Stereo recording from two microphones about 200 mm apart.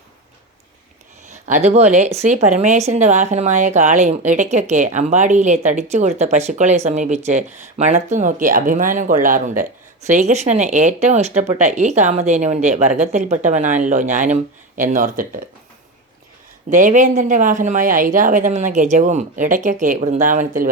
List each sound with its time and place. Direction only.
1.3 s speech: 35° right (ahead or behind)
16.6 s speech: 40° right (ahead or behind)